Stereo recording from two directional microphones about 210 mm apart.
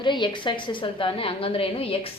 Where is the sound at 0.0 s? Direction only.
20° left (ahead or behind).